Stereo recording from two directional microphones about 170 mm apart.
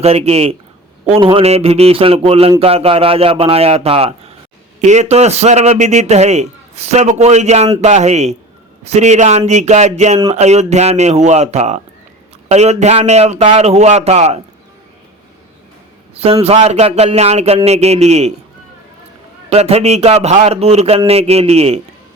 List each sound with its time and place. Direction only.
0.0 s a man's voice: 35° right (ahead or behind)
16.2 s a man's voice: 35° right (ahead or behind)
19.5 s a man's voice: 40° right (ahead or behind)